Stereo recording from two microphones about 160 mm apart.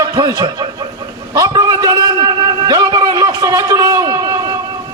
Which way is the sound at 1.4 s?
25° right (ahead or behind).